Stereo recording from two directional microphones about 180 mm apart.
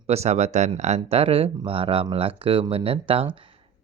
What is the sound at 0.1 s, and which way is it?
Speech, 35° right (ahead or behind).